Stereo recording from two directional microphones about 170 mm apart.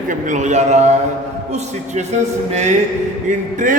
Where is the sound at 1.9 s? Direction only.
40° right (ahead or behind).